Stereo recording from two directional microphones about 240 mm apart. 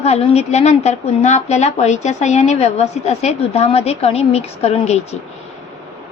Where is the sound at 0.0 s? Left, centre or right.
Left.